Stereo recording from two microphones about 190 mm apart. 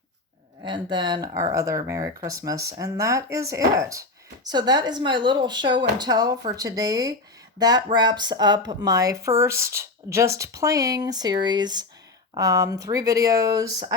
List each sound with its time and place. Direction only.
0.6 s speech: 25° right (ahead or behind)